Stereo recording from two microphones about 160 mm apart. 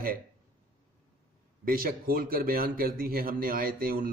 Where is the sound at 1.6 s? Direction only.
65° right (ahead or behind).